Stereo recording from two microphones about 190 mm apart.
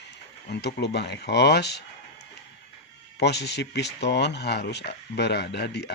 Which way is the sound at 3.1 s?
60° left (ahead or behind).